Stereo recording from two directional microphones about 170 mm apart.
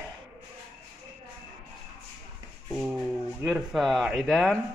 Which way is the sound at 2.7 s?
Centre (ahead or behind).